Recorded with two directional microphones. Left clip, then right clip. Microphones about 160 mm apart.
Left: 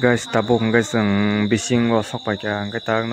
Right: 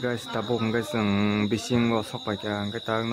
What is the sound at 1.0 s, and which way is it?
Speech, 15° left (ahead or behind).